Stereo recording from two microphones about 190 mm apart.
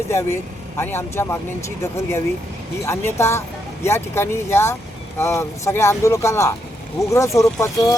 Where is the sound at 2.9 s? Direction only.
15° left (ahead or behind).